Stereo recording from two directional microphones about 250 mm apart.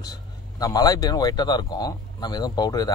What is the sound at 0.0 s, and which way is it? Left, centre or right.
Speech, centre.